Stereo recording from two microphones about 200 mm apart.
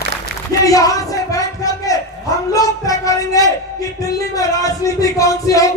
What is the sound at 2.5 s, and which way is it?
Speech, 15° left (ahead or behind).